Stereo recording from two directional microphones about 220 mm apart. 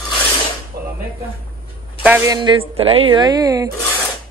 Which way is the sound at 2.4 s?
25° right (ahead or behind).